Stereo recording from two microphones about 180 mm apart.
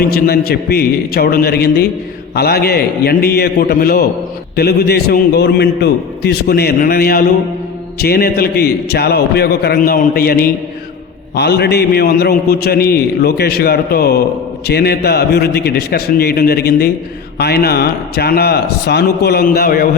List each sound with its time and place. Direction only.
0.0 s a man's voice: 60° left (ahead or behind)